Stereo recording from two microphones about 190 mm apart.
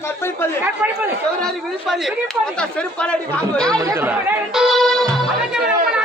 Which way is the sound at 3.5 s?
5° left (ahead or behind).